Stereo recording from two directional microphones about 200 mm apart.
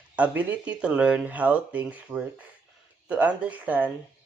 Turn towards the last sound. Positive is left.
turn(degrees=-10)  # may be behind; listen again after turning